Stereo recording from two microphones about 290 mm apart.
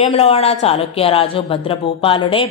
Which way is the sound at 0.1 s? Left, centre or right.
Left.